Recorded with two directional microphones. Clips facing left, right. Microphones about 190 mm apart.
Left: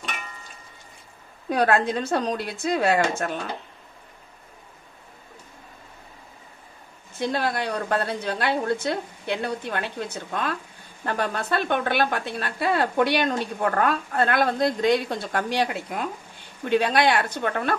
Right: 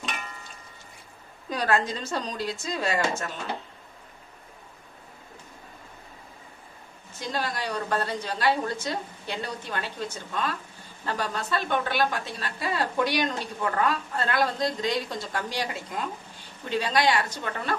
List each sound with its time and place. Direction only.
1.5 s a woman's voice: 60° left (ahead or behind)
7.2 s a woman's voice: 60° left (ahead or behind)